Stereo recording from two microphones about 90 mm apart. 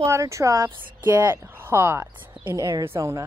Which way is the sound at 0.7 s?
25° right (ahead or behind).